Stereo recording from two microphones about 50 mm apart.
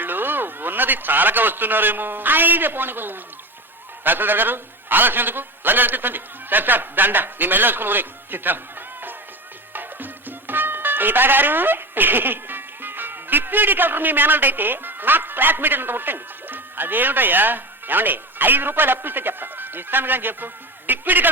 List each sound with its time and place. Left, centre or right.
0.0 s a man's voice: right